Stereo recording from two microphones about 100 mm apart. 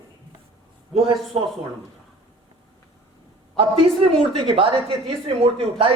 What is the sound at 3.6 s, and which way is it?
A woman's voice, 65° right (ahead or behind).